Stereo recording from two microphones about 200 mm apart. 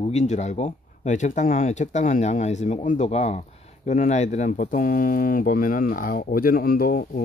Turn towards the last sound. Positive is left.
turn(degrees=45)  # may be behind; listen again after turning